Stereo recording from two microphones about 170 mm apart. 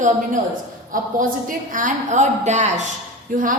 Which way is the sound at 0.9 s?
50° right (ahead or behind).